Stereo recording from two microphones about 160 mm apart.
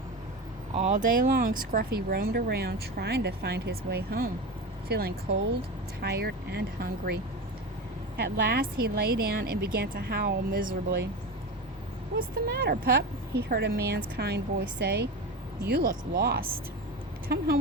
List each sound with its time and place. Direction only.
0.7 s a woman's voice: 50° right (ahead or behind); by 7.2 s 70° right (ahead or behind)
8.1 s speech: 80° right
12.5 s a woman's voice: 85° right